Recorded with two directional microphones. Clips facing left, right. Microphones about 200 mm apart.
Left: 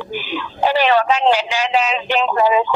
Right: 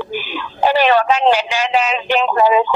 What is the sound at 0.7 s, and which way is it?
Speech, 50° right (ahead or behind).